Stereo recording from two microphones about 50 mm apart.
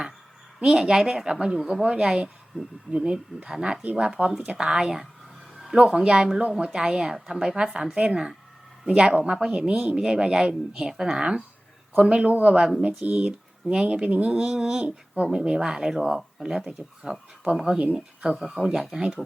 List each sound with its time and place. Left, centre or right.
0.6 s speech: centre
13.2 s a sound: centre
13.8 s speech: right
14.3 s speech: centre
14.8 s speech: right